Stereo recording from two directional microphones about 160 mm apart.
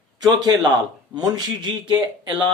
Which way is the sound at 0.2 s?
25° right (ahead or behind).